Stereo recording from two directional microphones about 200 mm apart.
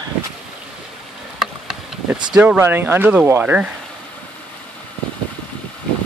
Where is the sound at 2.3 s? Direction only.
5° right (ahead or behind).